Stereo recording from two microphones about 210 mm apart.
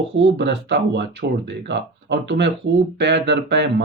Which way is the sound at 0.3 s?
55° right (ahead or behind).